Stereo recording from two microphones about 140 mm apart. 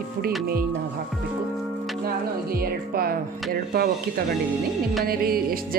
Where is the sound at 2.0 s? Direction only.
90° right.